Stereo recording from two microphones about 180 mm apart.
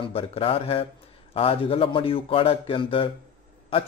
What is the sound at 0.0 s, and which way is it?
Speech, 30° left (ahead or behind).